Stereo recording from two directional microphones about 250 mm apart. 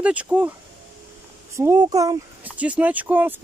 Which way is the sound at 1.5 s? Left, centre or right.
Centre.